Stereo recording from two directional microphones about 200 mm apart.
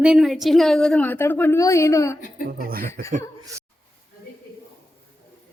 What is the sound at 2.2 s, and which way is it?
Speech, 40° left (ahead or behind).